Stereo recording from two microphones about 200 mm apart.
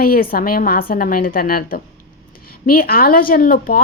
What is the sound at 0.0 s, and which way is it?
A woman's voice, 45° left (ahead or behind).